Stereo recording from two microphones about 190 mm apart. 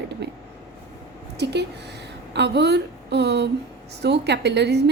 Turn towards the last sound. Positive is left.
turn(degrees=-65)  # may be behind; listen again after turning